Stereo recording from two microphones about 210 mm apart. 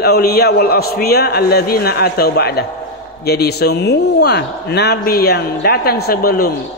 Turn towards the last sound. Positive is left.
turn(degrees=45)  # may be behind; listen again after turning